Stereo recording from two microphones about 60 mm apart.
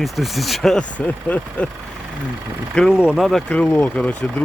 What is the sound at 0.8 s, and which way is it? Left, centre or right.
Speech, left.